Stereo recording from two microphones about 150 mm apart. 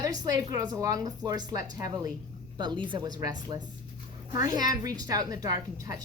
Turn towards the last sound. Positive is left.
turn(degrees=-20)  # may be behind; listen again after turning